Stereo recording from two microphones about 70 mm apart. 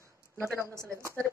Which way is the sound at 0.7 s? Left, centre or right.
Right.